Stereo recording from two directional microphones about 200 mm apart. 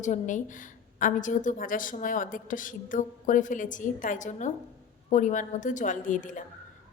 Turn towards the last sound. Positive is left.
turn(degrees=40)  # may be behind; listen again after turning